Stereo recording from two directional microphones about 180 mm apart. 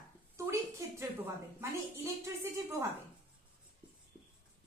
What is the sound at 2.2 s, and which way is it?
Speech, 15° right (ahead or behind).